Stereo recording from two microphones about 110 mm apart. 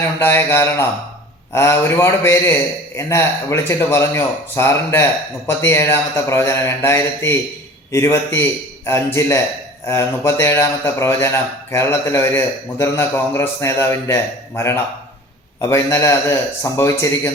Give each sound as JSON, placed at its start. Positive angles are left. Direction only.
{"t": 0.2, "sound": "a man's voice", "side_deg": 20}